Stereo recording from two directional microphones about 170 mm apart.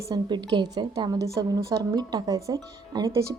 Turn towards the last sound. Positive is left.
turn(degrees=-20)  # may be behind; listen again after turning